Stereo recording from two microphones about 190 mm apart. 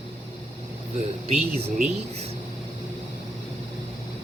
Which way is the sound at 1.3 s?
35° right (ahead or behind).